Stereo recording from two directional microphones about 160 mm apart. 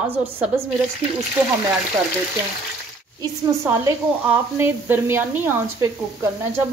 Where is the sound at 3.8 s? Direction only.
15° right (ahead or behind).